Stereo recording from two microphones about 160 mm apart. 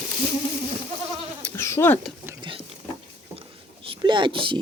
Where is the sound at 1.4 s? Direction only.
15° left (ahead or behind).